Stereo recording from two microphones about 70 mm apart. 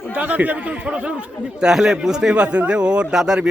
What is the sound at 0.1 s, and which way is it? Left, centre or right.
A man's voice, right.